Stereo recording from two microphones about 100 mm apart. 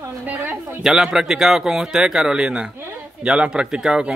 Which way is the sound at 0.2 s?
20° right (ahead or behind).